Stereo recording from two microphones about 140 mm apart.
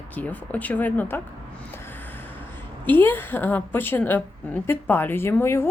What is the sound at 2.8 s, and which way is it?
A woman's voice, 15° left (ahead or behind).